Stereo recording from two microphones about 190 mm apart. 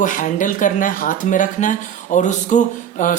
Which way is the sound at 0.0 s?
40° left (ahead or behind).